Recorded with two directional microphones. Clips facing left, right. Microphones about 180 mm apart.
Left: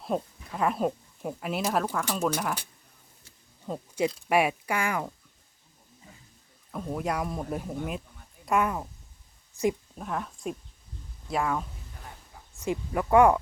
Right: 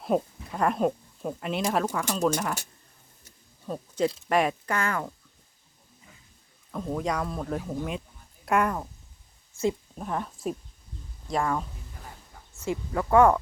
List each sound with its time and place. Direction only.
0.0 s speech: centre (ahead or behind)
3.7 s speech: 10° left (ahead or behind)
6.7 s speech: 5° left (ahead or behind)
8.4 s speech: centre (ahead or behind)
9.5 s speech: 15° left (ahead or behind)
9.9 s speech: centre (ahead or behind)
12.5 s speech: 15° left (ahead or behind)